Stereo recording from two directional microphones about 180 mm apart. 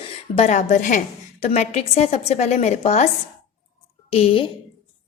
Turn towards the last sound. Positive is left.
turn(degrees=30)  # may be behind; listen again after turning